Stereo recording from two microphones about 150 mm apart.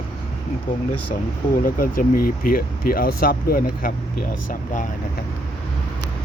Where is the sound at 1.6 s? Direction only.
70° left (ahead or behind).